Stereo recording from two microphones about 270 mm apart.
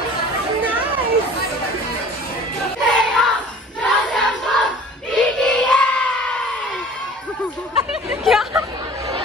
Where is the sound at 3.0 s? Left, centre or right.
Centre.